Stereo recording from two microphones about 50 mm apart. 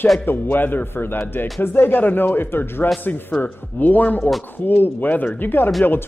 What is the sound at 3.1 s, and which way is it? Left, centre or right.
A man's voice, left.